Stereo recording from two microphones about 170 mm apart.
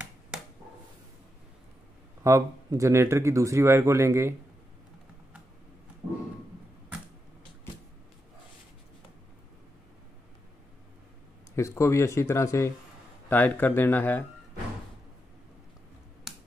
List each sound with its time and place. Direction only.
2.2 s speech: 20° right (ahead or behind)
11.5 s a man's voice: 15° left (ahead or behind)